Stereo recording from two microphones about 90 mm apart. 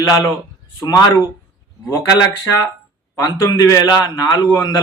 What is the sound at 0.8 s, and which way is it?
Speech, 45° left (ahead or behind).